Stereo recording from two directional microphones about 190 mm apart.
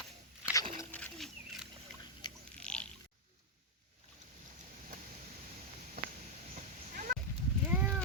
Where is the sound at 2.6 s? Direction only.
5° left (ahead or behind).